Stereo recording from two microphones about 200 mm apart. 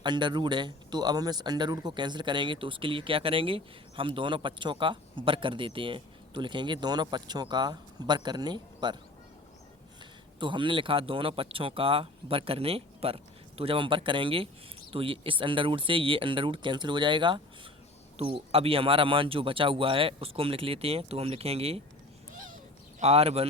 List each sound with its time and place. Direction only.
0.0 s speech: 20° right (ahead or behind)
10.4 s speech: 25° right (ahead or behind)
23.0 s speech: 30° right (ahead or behind)